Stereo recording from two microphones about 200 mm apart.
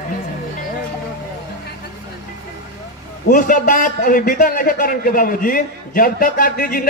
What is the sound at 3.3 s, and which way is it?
A man's voice, 40° left (ahead or behind).